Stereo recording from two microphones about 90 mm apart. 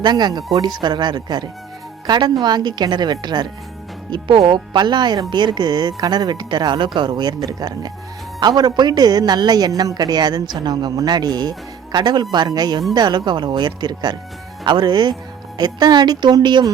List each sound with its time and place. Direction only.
0.0 s a woman's voice: 50° right (ahead or behind)